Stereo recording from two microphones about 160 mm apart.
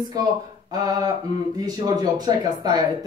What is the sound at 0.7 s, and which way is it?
Speech, 25° right (ahead or behind).